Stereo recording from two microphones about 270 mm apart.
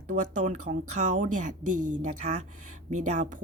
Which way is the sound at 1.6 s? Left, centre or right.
Right.